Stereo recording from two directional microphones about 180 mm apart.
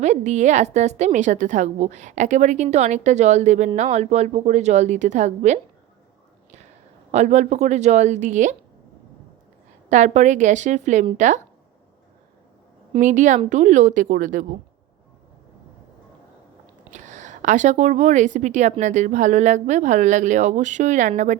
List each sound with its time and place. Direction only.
0.0 s a woman's voice: 40° right (ahead or behind)
7.1 s a woman's voice: 40° right (ahead or behind)
9.9 s a woman's voice: 40° right (ahead or behind)
12.9 s speech: 45° right (ahead or behind)
16.9 s a woman's voice: 40° right (ahead or behind)